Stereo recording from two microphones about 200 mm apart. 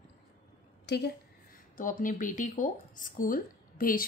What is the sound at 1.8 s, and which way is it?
Speech, 40° left (ahead or behind).